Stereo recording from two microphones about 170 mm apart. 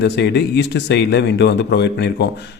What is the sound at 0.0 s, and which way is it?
Speech, 80° left.